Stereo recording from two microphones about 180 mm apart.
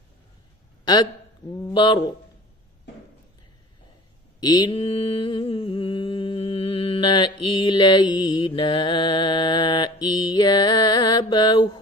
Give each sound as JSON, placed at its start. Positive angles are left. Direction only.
{"t": 1.7, "sound": "speech", "side_deg": 25}
{"t": 4.4, "sound": "mantra", "side_deg": 20}